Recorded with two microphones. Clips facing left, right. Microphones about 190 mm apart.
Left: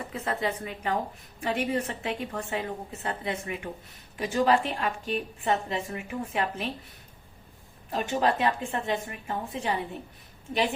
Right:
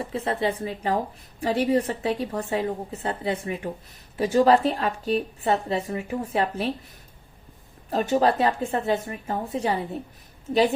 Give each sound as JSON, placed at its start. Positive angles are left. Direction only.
{"t": 0.0, "sound": "a woman's voice", "side_deg": -30}
{"t": 7.9, "sound": "a woman's voice", "side_deg": -40}